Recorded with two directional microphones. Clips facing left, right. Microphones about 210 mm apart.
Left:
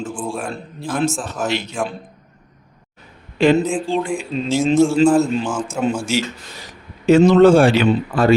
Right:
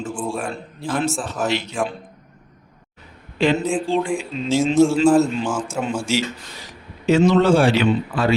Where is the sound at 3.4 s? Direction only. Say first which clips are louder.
Left 4 dB; 50° left (ahead or behind).